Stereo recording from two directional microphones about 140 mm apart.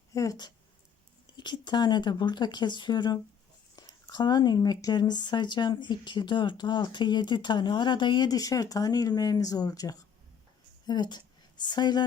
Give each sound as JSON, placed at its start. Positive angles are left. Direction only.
{"t": 0.1, "sound": "a woman's voice", "side_deg": 25}